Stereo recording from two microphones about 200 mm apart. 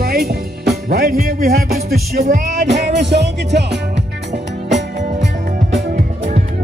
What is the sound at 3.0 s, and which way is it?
Music, 60° right (ahead or behind).